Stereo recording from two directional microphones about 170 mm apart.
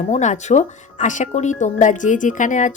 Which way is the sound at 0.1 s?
45° left (ahead or behind).